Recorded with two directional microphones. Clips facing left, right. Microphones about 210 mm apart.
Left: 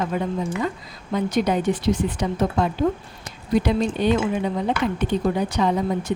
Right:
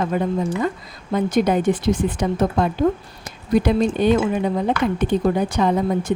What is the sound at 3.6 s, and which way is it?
Speech, 50° right (ahead or behind).